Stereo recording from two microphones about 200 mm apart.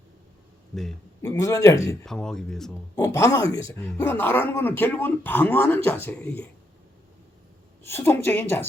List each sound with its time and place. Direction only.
1.2 s speech: 15° left (ahead or behind)
2.0 s speech: 5° left (ahead or behind)
2.9 s speech: 15° left (ahead or behind)
7.9 s speech: 10° left (ahead or behind)